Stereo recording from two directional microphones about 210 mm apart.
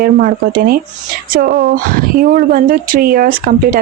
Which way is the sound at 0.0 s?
45° right (ahead or behind).